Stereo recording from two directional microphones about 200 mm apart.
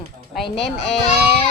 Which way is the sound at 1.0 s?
30° left (ahead or behind).